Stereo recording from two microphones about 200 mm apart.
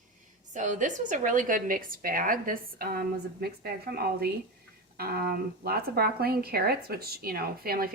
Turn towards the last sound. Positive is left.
turn(degrees=-50)  # may be behind; listen again after turning